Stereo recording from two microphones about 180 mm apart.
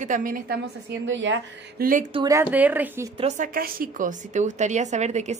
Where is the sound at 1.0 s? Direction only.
90° right.